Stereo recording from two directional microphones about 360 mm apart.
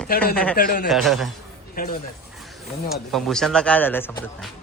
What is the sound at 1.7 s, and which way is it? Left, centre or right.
Speech, left.